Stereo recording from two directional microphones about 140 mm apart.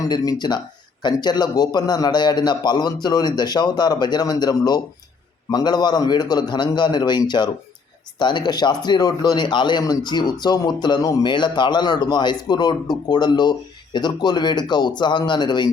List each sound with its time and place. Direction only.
0.1 s a man's voice: 30° left (ahead or behind)